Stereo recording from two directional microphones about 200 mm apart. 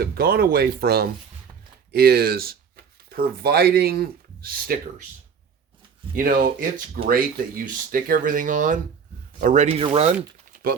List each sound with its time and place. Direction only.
0.0 s speech: 50° right (ahead or behind)
6.1 s speech: 45° right (ahead or behind)
10.5 s typing: 50° right (ahead or behind)